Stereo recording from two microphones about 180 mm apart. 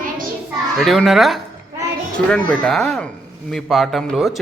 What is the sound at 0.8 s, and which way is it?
Speech, centre (ahead or behind).